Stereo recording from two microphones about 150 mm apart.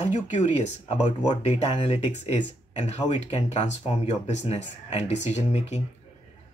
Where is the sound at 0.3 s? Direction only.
50° left (ahead or behind).